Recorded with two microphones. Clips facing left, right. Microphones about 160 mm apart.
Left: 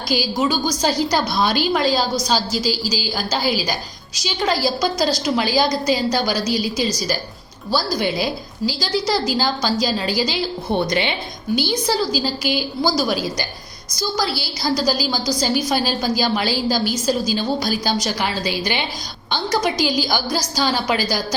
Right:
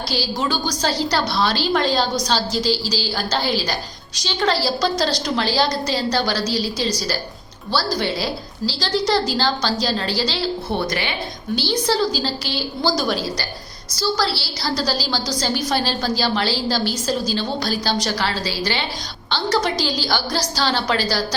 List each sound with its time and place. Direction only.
0.1 s a woman's voice: 10° left (ahead or behind)